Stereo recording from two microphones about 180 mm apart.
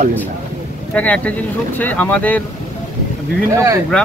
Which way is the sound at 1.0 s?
10° left (ahead or behind).